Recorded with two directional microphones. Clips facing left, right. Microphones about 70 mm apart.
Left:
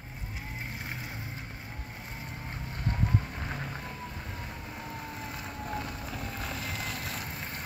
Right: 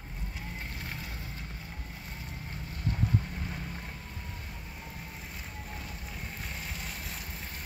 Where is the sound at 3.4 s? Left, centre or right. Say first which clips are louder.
Left 3 dB; left.